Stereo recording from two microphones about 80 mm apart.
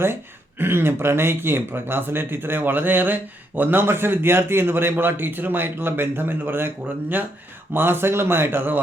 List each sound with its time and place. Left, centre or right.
0.6 s speech: right
7.7 s speech: right